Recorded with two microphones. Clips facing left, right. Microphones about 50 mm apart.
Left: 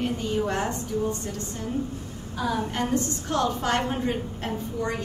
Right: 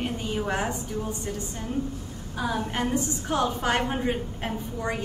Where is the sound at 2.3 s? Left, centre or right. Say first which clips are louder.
Left 1 dB; centre.